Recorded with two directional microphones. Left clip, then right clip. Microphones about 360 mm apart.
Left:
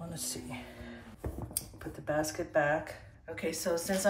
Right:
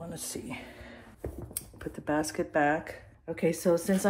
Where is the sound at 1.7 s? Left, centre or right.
Right.